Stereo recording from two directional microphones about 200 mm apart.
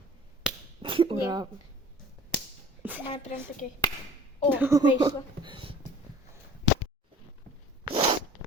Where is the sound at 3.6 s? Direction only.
40° left (ahead or behind).